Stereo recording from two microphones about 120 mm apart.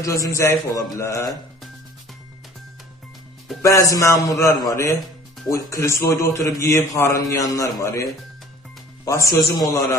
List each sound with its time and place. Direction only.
0.0 s a man's voice: 25° left (ahead or behind)
3.6 s a man's voice: 25° left (ahead or behind)